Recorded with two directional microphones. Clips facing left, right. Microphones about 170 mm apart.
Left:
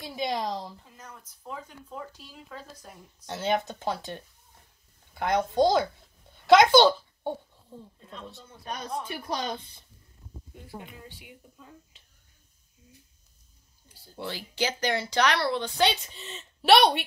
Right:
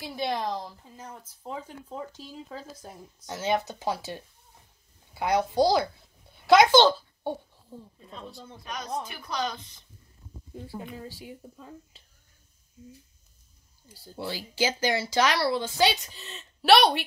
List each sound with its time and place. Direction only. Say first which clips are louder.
0.1 s speech: even; 10° left (ahead or behind)
0.9 s speech: right 4 dB; 30° right (ahead or behind)
3.3 s speech: even; 5° right (ahead or behind)
6.3 s a sound: even; centre (ahead or behind)
6.7 s a child's voice: even; 10° left (ahead or behind)
7.7 s speech: right 1 dB; 5° right (ahead or behind)
8.6 s a woman's voice: even; 30° left (ahead or behind)
10.5 s speech: right 5 dB; 30° right (ahead or behind)
14.1 s speech: right 2 dB; 10° right (ahead or behind)